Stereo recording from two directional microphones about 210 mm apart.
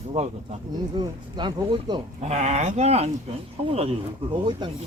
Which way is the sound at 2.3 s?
30° right (ahead or behind).